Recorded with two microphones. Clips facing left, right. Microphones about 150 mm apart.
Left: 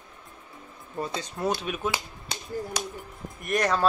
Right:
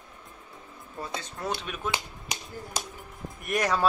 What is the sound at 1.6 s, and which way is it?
Speech, 5° left (ahead or behind).